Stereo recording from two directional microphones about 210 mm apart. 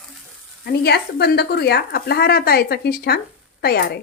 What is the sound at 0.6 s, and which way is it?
Speech, 50° left (ahead or behind).